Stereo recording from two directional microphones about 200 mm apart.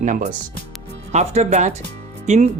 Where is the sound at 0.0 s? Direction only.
40° right (ahead or behind).